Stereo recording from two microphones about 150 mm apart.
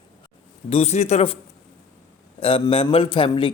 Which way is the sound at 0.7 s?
45° left (ahead or behind).